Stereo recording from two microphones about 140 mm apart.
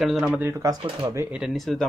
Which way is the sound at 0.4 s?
20° right (ahead or behind).